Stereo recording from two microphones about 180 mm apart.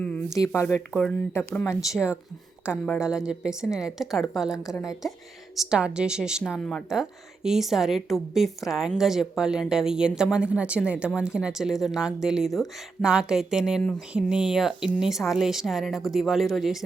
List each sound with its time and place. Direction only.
0.0 s speech: 5° left (ahead or behind)
0.3 s speech: 15° left (ahead or behind)
1.9 s a woman's voice: 5° right (ahead or behind)